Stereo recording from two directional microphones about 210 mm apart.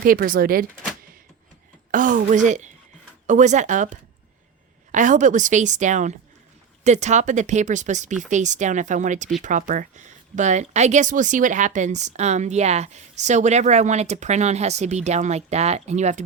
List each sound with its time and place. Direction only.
0.0 s speech: 40° right (ahead or behind)
1.9 s speech: 40° right (ahead or behind)